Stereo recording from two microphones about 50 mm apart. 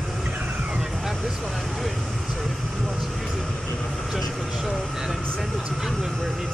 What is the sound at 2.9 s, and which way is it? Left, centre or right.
Speech, centre.